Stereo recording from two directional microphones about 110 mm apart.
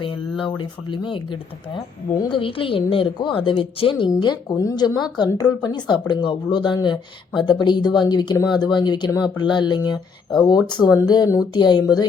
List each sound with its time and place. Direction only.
0.0 s speech: 50° left (ahead or behind)
4.2 s speech: 40° left (ahead or behind)